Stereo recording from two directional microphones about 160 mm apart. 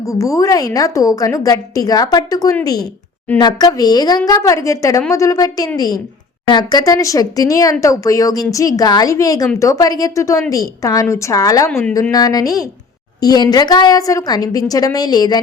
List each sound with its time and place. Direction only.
0.0 s speech: 20° left (ahead or behind)